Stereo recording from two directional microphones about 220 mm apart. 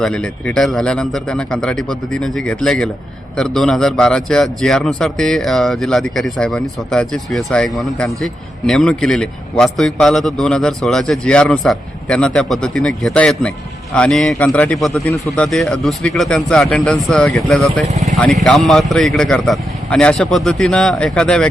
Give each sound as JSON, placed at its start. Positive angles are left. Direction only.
{"t": 0.0, "sound": "a man's voice", "side_deg": 5}
{"t": 17.8, "sound": "speech", "side_deg": -30}
{"t": 18.2, "sound": "a man's voice", "side_deg": 0}